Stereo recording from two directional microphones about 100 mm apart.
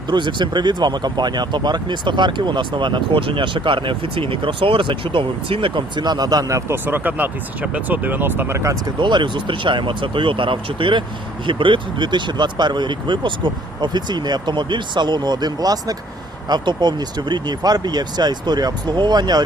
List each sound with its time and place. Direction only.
0.1 s speech: 50° right (ahead or behind)
6.7 s speech: 20° right (ahead or behind)
9.0 s speech: 50° right (ahead or behind)